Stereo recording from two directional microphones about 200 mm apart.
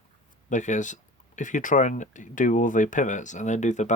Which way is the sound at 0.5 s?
40° left (ahead or behind).